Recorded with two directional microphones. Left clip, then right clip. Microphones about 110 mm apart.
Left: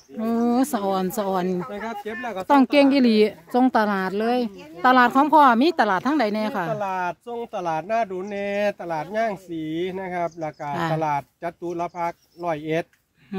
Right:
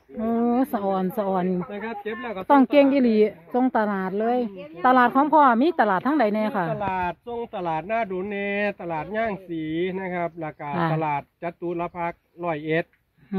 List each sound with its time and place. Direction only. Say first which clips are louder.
0.2 s a sound: left 1 dB; 45° left (ahead or behind)
0.8 s a woman's voice: left 1 dB; 65° left (ahead or behind)
1.7 s speech: even; 70° left (ahead or behind)
2.4 s speech: even; 30° left (ahead or behind)
2.9 s a woman's voice: left 1 dB; 55° left (ahead or behind)
4.8 s a woman's voice: left 1 dB; 40° left (ahead or behind)
10.7 s speech: even; 15° left (ahead or behind)
11.0 s speech: left 2 dB; 30° left (ahead or behind)